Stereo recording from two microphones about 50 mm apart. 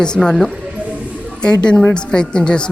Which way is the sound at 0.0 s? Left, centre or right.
Centre.